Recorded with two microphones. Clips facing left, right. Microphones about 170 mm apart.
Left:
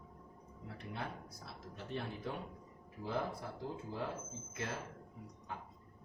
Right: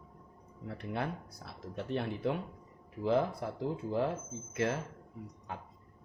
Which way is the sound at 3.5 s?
70° right (ahead or behind).